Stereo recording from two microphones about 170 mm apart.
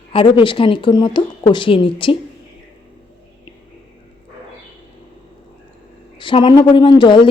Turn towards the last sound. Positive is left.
turn(degrees=25)  # may be behind; listen again after turning